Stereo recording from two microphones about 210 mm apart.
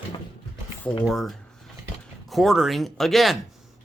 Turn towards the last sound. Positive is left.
turn(degrees=0)  # may be behind; listen again after turning